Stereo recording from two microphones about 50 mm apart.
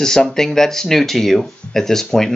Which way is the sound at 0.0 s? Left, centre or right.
Centre.